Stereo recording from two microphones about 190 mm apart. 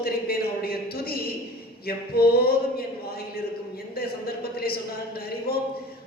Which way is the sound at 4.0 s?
55° left (ahead or behind).